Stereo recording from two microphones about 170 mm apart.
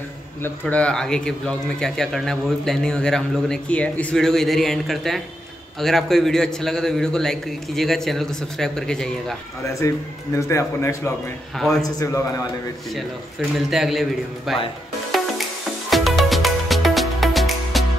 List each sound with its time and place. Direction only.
0.4 s speech: 10° left (ahead or behind)
9.8 s a man's voice: 15° left (ahead or behind)
11.5 s speech: centre (ahead or behind)
11.8 s a man's voice: 20° left (ahead or behind)
13.7 s speech: centre (ahead or behind)
15.0 s music: centre (ahead or behind)